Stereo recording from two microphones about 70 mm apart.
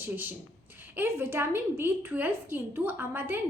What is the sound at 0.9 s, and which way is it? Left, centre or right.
A woman's voice, right.